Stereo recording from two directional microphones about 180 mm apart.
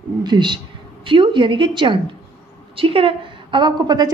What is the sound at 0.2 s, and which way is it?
A woman's voice, 25° right (ahead or behind).